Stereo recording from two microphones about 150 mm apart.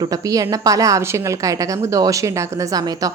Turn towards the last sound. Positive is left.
turn(degrees=-25)  # may be behind; listen again after turning